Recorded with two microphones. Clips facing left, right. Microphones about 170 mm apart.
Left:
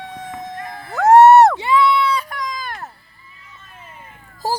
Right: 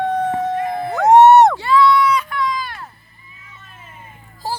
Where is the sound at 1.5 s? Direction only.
20° left (ahead or behind).